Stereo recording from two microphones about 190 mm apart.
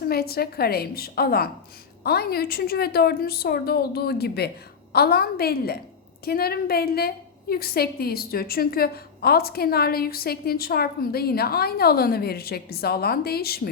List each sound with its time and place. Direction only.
0.1 s a woman's voice: 55° left (ahead or behind)